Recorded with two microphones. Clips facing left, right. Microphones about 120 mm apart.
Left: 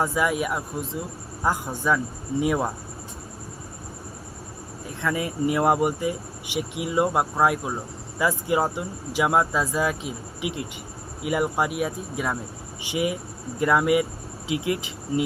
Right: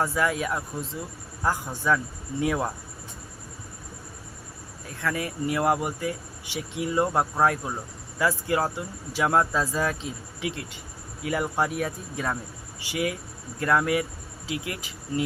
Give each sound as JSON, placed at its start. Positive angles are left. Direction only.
{"t": 0.0, "sound": "speech", "side_deg": 15}
{"t": 4.9, "sound": "speech", "side_deg": 20}
{"t": 12.8, "sound": "speech", "side_deg": 20}